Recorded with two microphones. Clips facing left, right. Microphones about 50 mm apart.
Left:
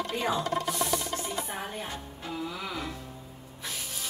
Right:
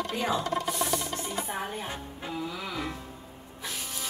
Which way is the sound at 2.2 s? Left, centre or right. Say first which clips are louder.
Right 1 dB; right.